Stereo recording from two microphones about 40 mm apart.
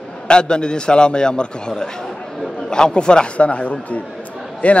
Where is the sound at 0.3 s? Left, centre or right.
Left.